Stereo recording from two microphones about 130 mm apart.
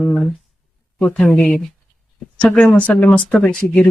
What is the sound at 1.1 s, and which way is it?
Speech, 10° left (ahead or behind).